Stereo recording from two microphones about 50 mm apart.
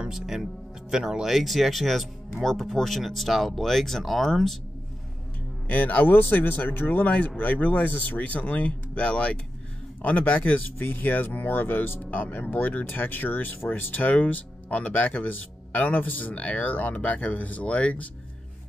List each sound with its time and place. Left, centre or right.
0.1 s speech: centre
5.7 s speech: left